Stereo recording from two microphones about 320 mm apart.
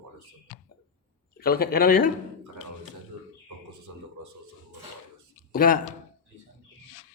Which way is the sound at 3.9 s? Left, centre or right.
Right.